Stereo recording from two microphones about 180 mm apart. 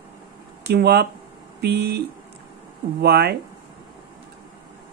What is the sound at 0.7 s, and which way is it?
Speech, 60° right (ahead or behind).